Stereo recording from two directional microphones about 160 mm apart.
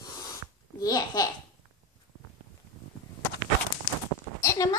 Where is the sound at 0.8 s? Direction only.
25° left (ahead or behind).